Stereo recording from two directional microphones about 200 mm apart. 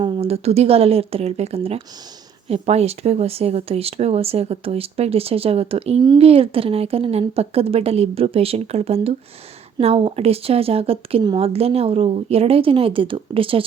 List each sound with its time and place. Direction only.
0.0 s speech: 30° right (ahead or behind)